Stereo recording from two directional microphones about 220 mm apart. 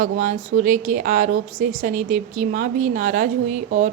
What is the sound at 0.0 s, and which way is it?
A woman's voice, 35° right (ahead or behind).